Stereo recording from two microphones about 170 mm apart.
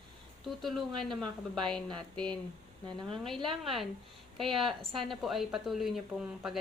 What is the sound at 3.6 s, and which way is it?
Speech, centre (ahead or behind).